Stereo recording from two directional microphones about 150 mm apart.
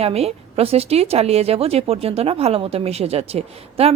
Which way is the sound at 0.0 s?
45° right (ahead or behind).